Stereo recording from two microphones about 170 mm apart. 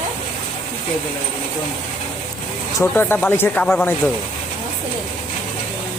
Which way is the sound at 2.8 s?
15° left (ahead or behind).